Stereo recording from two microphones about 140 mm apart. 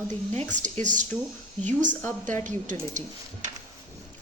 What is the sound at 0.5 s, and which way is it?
Speech, 60° right (ahead or behind).